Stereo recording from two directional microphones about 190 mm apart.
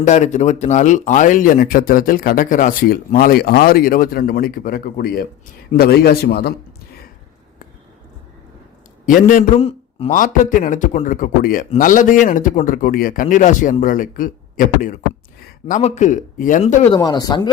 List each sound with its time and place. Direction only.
0.0 s a man's voice: 40° left (ahead or behind); by 6.5 s 55° left (ahead or behind)
9.0 s speech: 45° left (ahead or behind)
9.6 s a sound: 30° left (ahead or behind)
10.2 s a man's voice: 45° left (ahead or behind)
16.9 s speech: 20° left (ahead or behind)